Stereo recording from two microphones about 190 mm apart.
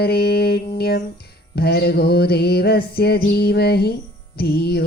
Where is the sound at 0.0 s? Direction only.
55° left (ahead or behind).